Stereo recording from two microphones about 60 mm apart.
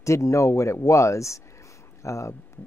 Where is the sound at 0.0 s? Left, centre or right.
Left.